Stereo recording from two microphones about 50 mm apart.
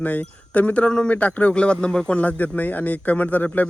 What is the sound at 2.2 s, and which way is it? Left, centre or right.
Speech, left.